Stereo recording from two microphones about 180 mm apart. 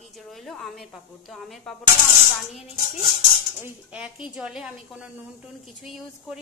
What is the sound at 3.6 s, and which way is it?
A woman's voice, 5° right (ahead or behind).